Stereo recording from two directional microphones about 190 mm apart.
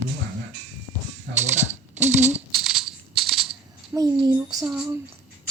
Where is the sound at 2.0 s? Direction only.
35° right (ahead or behind).